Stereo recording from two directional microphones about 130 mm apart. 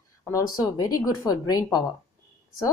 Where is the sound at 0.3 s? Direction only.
25° left (ahead or behind).